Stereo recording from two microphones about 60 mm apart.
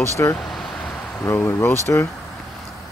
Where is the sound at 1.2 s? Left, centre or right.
Left.